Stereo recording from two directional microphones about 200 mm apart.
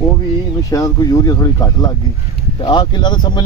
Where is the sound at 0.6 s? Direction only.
15° left (ahead or behind).